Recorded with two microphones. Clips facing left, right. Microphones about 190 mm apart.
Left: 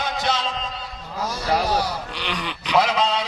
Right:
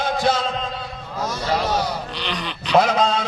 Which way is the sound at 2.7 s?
50° right (ahead or behind).